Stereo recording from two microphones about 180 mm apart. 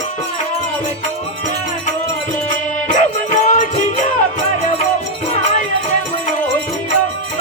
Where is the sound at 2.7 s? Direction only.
45° left (ahead or behind).